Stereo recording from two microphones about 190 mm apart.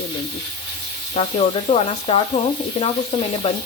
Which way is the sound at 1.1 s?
35° left (ahead or behind).